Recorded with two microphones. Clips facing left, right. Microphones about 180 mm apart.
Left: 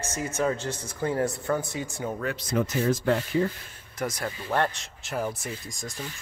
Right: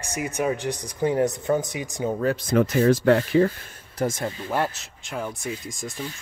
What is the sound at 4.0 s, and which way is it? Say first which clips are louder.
Speech: right 5 dB; 25° right (ahead or behind).